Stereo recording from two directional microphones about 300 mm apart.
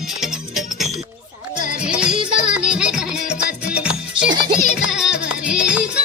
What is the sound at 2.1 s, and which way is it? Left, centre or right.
Music, centre.